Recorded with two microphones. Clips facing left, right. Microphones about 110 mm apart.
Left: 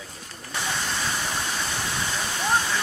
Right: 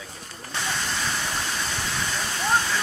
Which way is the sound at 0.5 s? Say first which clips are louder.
Even; 15° left (ahead or behind).